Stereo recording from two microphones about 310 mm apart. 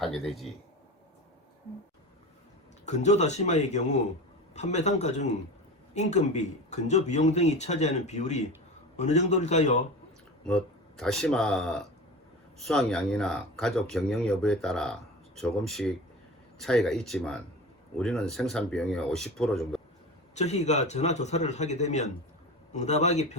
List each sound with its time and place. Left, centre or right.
0.0 s speech: centre
2.8 s speech: left
10.4 s speech: centre
20.3 s speech: left